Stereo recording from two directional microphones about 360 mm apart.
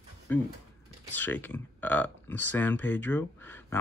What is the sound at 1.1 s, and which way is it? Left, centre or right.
Speech, centre.